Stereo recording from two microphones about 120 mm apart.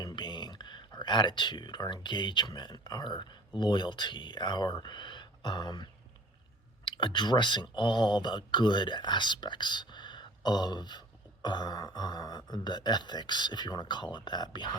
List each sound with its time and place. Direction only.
0.0 s speech: 40° left (ahead or behind)